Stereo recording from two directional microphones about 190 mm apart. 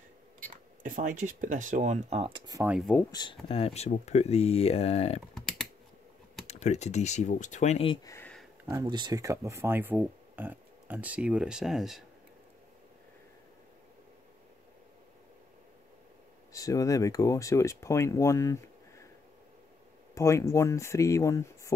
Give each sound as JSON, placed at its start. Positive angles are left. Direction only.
{"t": 0.5, "sound": "speech", "side_deg": -45}
{"t": 2.6, "sound": "speech", "side_deg": -5}
{"t": 3.1, "sound": "speech", "side_deg": 25}
{"t": 5.3, "sound": "computer keyboard", "side_deg": 0}
{"t": 6.4, "sound": "speech", "side_deg": 35}
{"t": 8.1, "sound": "a sound", "side_deg": 10}
{"t": 8.6, "sound": "speech", "side_deg": -20}
{"t": 16.5, "sound": "speech", "side_deg": 15}
{"t": 20.2, "sound": "speech", "side_deg": 15}